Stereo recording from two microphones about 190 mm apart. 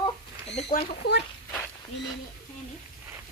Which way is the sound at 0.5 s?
50° left (ahead or behind).